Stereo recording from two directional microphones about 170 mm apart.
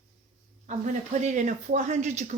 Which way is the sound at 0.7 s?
45° right (ahead or behind).